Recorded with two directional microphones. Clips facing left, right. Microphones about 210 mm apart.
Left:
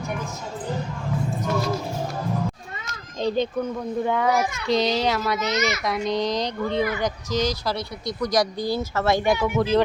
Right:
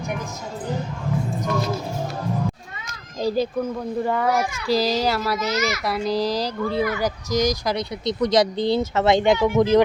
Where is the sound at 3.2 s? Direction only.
5° right (ahead or behind).